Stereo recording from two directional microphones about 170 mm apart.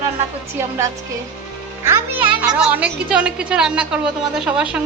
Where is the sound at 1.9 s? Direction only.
10° right (ahead or behind).